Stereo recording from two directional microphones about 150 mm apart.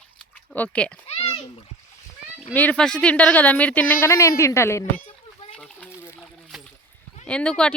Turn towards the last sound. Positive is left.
turn(degrees=5)  # may be behind; listen again after turning